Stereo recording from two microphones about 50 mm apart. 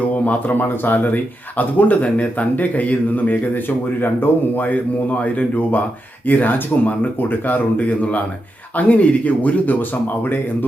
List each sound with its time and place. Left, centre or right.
0.3 s speech: left